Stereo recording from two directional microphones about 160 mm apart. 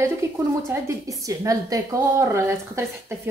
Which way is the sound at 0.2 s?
15° right (ahead or behind).